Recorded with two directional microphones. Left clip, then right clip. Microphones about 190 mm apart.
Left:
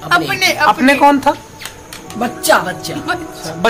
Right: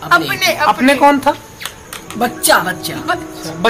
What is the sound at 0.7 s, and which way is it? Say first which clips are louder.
Speech: even; centre (ahead or behind).